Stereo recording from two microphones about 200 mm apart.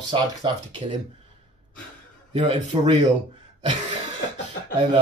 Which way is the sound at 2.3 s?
25° right (ahead or behind).